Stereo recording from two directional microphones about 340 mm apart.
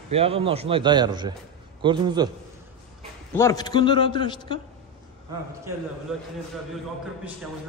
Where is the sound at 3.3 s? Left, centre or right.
Centre.